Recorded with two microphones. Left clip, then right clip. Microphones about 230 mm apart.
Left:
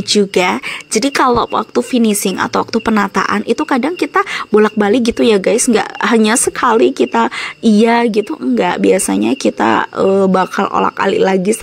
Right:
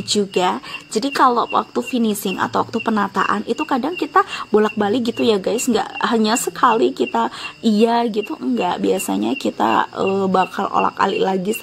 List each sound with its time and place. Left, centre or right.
0.3 s speech: left